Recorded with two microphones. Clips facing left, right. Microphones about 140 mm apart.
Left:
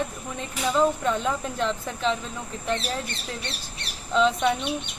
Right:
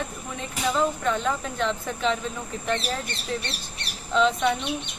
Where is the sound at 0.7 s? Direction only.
5° left (ahead or behind).